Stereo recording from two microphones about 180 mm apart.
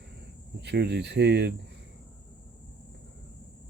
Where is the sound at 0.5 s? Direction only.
70° right (ahead or behind).